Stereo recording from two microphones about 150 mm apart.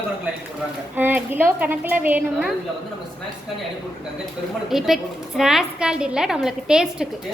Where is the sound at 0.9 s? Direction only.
10° right (ahead or behind).